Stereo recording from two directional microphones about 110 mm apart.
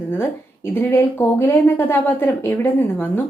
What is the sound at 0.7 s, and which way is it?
A woman's voice, 20° left (ahead or behind).